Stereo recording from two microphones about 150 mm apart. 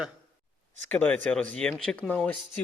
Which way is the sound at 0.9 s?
10° left (ahead or behind).